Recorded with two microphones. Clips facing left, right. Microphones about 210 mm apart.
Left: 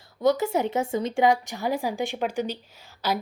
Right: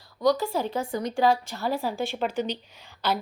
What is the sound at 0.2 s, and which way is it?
A woman's voice, 20° left (ahead or behind).